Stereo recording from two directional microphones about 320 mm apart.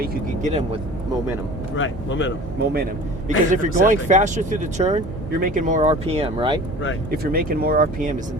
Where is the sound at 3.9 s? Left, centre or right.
Right.